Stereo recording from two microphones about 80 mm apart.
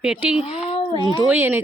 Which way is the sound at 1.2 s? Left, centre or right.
Right.